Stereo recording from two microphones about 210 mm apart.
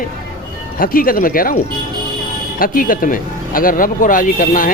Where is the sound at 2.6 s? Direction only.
40° left (ahead or behind).